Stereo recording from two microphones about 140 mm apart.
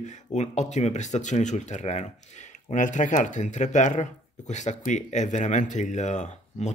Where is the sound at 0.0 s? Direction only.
55° left (ahead or behind).